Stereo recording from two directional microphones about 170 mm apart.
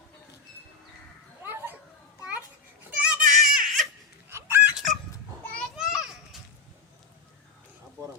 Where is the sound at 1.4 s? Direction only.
15° right (ahead or behind).